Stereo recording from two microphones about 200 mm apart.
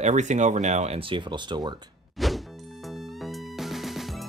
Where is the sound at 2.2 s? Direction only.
Centre (ahead or behind).